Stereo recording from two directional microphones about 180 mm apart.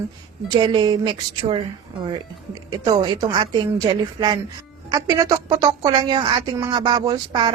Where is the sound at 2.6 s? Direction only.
25° right (ahead or behind).